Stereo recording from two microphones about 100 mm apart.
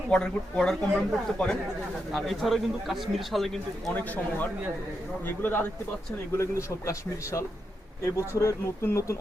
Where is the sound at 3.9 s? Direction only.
15° left (ahead or behind).